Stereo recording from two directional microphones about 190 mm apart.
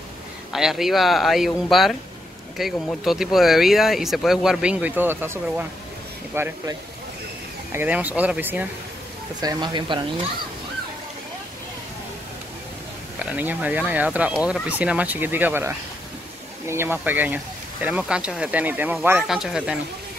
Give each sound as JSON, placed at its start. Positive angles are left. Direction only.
{"t": 0.5, "sound": "speech", "side_deg": 0}
{"t": 7.7, "sound": "speech", "side_deg": -10}
{"t": 9.4, "sound": "speech", "side_deg": -20}
{"t": 13.2, "sound": "speech", "side_deg": -10}